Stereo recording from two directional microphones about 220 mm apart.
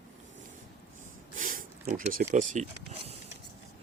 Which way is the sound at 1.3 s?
35° right (ahead or behind).